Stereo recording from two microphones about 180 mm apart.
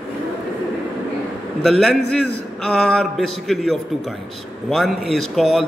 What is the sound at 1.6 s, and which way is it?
A man's voice, centre (ahead or behind).